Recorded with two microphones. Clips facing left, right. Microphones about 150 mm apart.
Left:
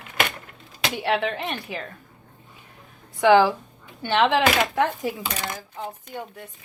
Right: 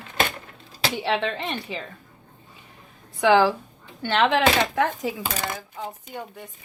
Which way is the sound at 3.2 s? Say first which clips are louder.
Left 2 dB; 15° left (ahead or behind).